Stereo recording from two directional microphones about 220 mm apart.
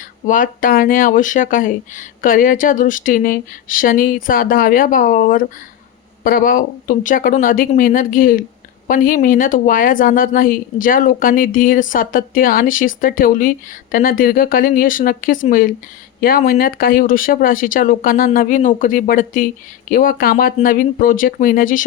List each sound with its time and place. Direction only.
0.3 s speech: 40° left (ahead or behind)